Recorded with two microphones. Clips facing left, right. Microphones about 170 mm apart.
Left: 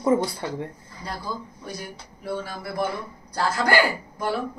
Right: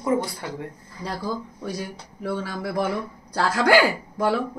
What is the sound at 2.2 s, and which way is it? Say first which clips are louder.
Speech: right 3 dB; 90° right.